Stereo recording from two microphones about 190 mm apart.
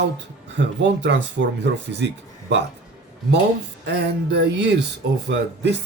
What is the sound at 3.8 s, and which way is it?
Speech, 60° right (ahead or behind).